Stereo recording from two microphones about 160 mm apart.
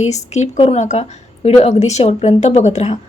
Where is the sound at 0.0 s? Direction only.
45° left (ahead or behind).